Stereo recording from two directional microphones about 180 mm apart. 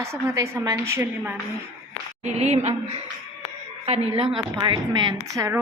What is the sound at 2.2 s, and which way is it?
Speech, 35° right (ahead or behind).